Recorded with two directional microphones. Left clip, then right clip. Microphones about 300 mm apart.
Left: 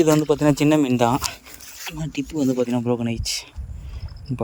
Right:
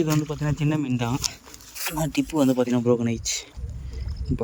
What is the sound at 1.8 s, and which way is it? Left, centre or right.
Speech, centre.